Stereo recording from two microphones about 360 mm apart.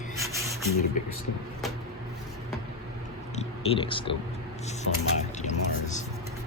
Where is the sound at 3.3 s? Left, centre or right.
Centre.